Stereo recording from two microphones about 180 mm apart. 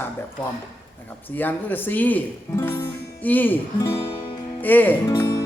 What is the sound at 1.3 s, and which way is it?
Speech, 10° left (ahead or behind).